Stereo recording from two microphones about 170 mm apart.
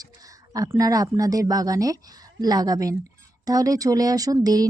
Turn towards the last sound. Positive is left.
turn(degrees=-20)  # may be behind; listen again after turning